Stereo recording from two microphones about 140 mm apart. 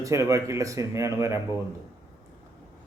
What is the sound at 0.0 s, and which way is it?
A man's voice, 20° right (ahead or behind).